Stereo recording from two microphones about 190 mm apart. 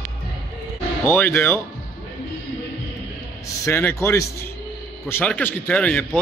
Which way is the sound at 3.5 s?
15° left (ahead or behind).